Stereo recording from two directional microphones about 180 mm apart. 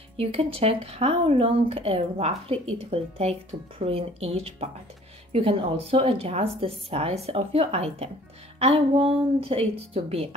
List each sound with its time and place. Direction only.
0.2 s speech: 35° right (ahead or behind)